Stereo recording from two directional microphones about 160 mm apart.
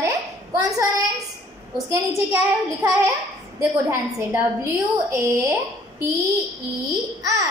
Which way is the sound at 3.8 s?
15° right (ahead or behind).